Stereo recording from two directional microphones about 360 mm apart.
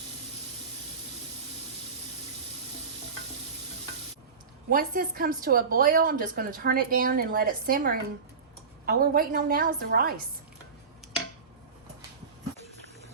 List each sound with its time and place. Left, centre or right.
4.7 s a woman's voice: right